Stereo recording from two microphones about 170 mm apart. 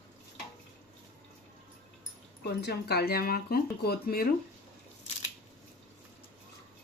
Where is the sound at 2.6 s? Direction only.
70° left (ahead or behind).